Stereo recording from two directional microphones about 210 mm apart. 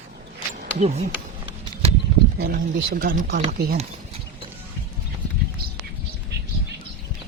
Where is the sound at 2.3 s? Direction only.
45° right (ahead or behind).